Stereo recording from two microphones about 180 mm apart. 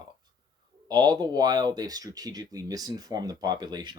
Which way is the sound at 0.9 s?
25° right (ahead or behind).